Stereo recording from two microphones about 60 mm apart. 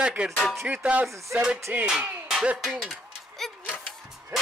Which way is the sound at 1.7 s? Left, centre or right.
Right.